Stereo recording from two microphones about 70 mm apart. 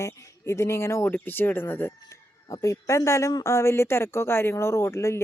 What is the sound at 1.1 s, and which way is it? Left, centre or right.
Speech, left.